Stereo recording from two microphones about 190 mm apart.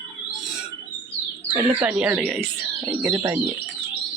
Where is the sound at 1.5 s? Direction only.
10° right (ahead or behind).